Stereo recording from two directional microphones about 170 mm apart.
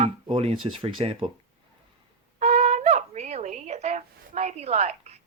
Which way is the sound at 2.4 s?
40° right (ahead or behind).